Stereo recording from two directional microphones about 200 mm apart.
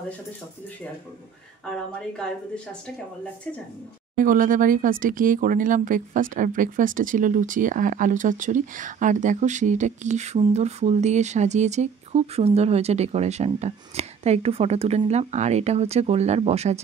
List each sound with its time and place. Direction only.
1.6 s a woman's voice: 5° left (ahead or behind)
4.2 s speech: 45° right (ahead or behind)